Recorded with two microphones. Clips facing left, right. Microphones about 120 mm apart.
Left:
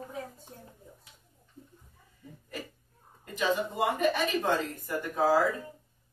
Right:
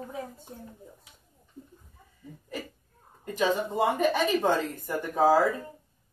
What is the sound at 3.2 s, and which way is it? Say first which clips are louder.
A woman's voice: right 3 dB; 30° right (ahead or behind).